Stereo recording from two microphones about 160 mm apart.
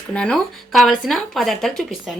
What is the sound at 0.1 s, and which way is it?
Speech, 5° left (ahead or behind).